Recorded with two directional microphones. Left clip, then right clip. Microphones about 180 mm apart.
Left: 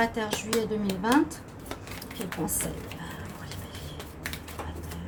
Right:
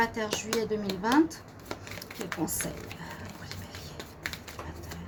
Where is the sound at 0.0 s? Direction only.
50° right (ahead or behind).